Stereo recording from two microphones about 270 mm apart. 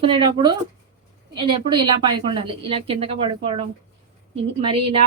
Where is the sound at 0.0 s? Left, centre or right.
Centre.